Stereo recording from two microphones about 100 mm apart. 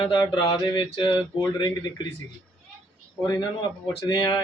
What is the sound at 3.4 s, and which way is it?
Speech, 50° left (ahead or behind).